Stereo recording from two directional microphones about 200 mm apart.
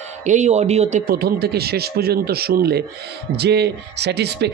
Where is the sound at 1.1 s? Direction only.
50° right (ahead or behind).